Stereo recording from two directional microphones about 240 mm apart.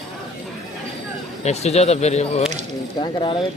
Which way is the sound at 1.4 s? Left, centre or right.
Left.